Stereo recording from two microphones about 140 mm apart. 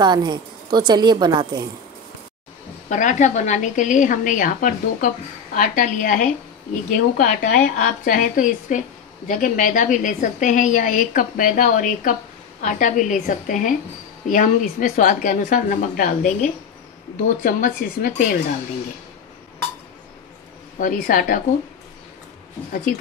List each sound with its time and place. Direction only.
0.0 s a woman's voice: 30° right (ahead or behind)
2.9 s a woman's voice: 60° left (ahead or behind)
17.4 s speech: 85° left
20.8 s a woman's voice: 80° left